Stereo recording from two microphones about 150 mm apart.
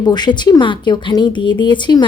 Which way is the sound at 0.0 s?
30° left (ahead or behind).